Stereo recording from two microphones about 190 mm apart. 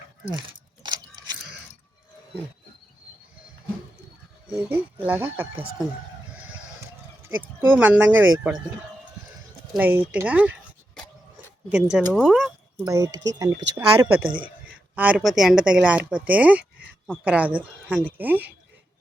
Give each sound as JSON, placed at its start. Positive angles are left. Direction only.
{"t": 0.3, "sound": "keys jangling", "side_deg": -25}
{"t": 4.4, "sound": "a woman's voice", "side_deg": -5}
{"t": 7.6, "sound": "a woman's voice", "side_deg": -10}
{"t": 9.7, "sound": "a woman's voice", "side_deg": -10}
{"t": 11.7, "sound": "speech", "side_deg": -5}
{"t": 12.8, "sound": "a woman's voice", "side_deg": -15}
{"t": 14.9, "sound": "a woman's voice", "side_deg": -10}